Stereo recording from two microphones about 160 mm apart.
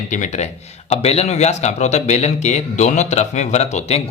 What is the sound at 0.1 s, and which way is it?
Speech, 50° left (ahead or behind).